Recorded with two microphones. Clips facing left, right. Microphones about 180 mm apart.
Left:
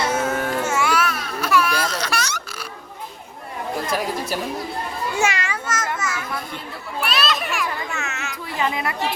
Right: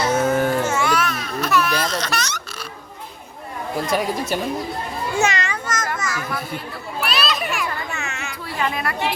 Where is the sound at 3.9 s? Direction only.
Centre (ahead or behind).